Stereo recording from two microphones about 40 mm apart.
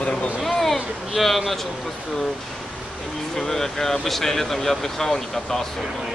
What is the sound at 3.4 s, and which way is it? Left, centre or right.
Speech, centre.